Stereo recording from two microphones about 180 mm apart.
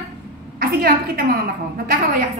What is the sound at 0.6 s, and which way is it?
Speech, 55° right (ahead or behind).